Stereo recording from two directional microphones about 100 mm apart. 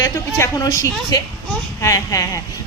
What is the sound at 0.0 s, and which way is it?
A woman's voice, 30° left (ahead or behind).